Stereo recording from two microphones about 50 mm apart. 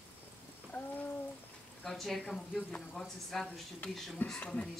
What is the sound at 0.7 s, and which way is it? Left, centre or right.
Speech, left.